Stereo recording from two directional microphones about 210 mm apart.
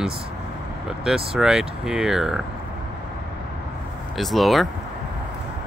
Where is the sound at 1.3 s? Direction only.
Centre (ahead or behind).